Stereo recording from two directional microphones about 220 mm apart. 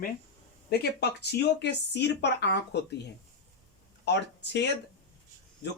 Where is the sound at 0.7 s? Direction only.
50° left (ahead or behind).